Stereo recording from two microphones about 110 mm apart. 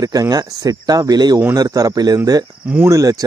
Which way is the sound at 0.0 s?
35° right (ahead or behind).